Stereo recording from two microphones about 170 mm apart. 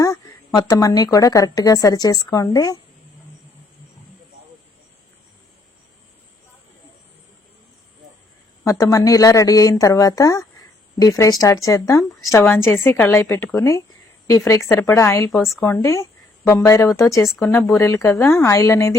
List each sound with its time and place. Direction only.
0.0 s speech: 20° left (ahead or behind)
8.6 s speech: 20° left (ahead or behind)